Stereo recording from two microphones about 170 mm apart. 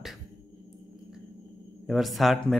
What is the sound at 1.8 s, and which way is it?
Speech, centre (ahead or behind).